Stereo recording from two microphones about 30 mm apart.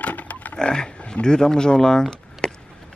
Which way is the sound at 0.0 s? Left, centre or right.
Left.